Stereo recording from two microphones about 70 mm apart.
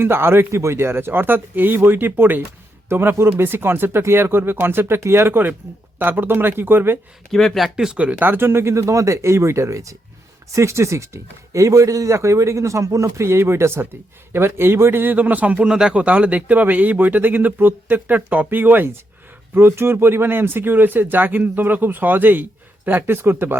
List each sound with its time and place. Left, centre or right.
0.0 s speech: right
7.3 s speech: centre
7.8 s speech: centre
8.3 s speech: right